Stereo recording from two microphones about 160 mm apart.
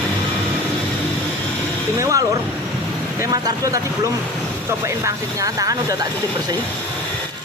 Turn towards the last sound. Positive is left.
turn(degrees=-20)  # may be behind; listen again after turning